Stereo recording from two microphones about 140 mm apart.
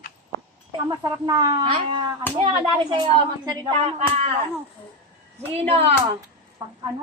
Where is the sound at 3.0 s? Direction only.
25° right (ahead or behind).